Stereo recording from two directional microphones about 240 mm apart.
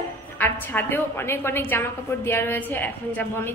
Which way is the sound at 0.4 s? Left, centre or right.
Centre.